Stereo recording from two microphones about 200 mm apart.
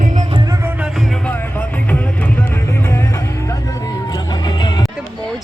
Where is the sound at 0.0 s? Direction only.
35° right (ahead or behind).